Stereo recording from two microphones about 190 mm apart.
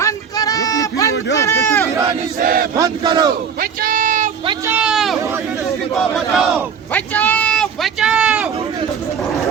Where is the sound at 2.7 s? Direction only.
20° right (ahead or behind).